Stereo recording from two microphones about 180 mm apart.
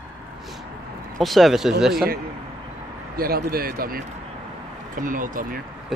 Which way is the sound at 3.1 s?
55° right (ahead or behind).